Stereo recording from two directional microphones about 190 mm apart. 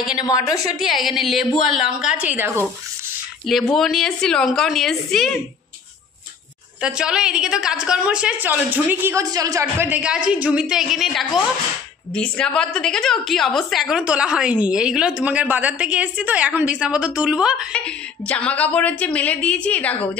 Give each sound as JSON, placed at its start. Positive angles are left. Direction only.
{"t": 0.1, "sound": "a woman's voice", "side_deg": 20}
{"t": 0.7, "sound": "a woman's voice", "side_deg": 0}
{"t": 6.8, "sound": "a woman's voice", "side_deg": -5}
{"t": 17.8, "sound": "speech", "side_deg": 5}